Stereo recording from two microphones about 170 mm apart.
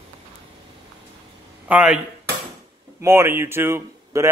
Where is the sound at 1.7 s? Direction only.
10° right (ahead or behind).